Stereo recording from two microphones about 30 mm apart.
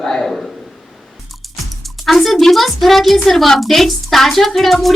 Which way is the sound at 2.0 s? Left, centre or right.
Centre.